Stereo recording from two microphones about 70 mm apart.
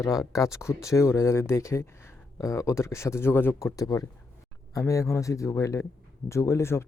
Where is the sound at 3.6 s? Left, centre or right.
Left.